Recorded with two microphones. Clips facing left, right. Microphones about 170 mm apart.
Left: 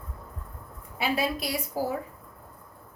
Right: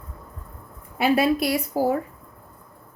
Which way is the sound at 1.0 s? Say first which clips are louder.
Right 8 dB; 65° right (ahead or behind).